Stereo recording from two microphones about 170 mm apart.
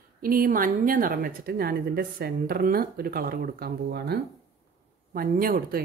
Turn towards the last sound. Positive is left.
turn(degrees=-60)  # may be behind; listen again after turning